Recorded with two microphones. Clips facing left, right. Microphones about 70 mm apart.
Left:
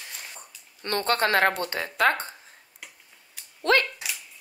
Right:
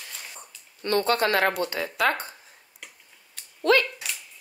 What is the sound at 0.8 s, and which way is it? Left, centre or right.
Speech, left.